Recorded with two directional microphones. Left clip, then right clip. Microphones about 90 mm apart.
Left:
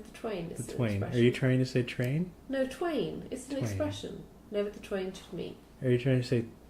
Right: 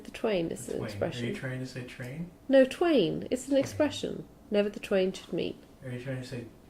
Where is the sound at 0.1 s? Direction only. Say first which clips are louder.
Right 7 dB; 35° right (ahead or behind).